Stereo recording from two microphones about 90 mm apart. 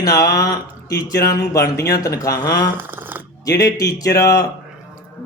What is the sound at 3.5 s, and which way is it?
Speech, 45° left (ahead or behind).